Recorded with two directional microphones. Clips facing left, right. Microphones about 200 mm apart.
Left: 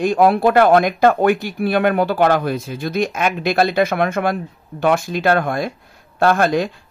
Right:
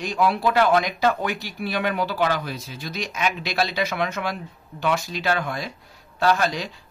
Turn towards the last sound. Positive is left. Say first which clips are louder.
# left 8 dB
turn(degrees=55)  # may be behind; listen again after turning